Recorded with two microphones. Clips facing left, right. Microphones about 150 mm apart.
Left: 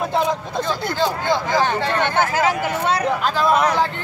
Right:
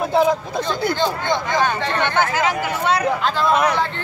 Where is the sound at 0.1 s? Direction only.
5° right (ahead or behind).